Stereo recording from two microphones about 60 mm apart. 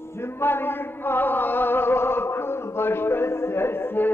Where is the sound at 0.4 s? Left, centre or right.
Left.